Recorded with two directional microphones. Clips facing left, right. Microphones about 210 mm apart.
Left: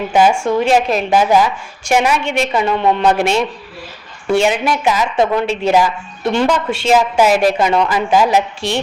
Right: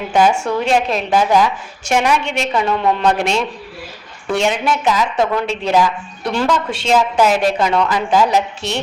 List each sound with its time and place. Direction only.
0.1 s a woman's voice: 5° left (ahead or behind)
5.1 s a woman's voice: 20° left (ahead or behind)
5.4 s a woman's voice: 5° left (ahead or behind)